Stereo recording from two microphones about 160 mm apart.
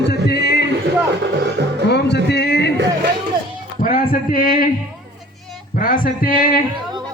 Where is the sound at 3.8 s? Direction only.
60° left (ahead or behind).